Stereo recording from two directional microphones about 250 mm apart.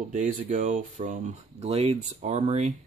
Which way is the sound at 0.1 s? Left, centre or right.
Right.